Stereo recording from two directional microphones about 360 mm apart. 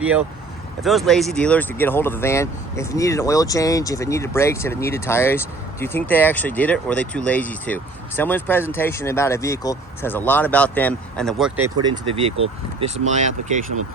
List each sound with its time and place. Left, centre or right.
0.8 s speech: centre